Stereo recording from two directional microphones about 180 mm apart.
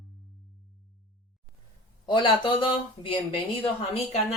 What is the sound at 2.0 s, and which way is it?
Speech, 30° left (ahead or behind).